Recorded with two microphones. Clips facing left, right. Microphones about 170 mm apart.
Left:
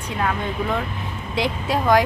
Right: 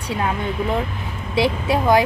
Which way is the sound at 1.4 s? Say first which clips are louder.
Right 4 dB; 25° right (ahead or behind).